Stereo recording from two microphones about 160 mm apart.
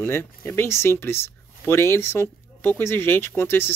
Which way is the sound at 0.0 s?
15° left (ahead or behind).